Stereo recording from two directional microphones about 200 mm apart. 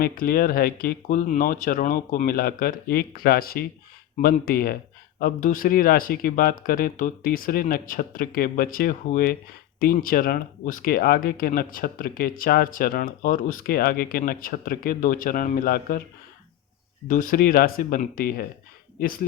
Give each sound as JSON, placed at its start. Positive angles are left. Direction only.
{"t": 0.0, "sound": "speech", "side_deg": 45}
{"t": 17.1, "sound": "speech", "side_deg": 40}